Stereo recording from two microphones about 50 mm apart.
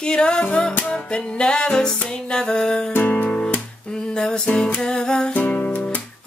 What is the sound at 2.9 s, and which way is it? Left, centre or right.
Music, left.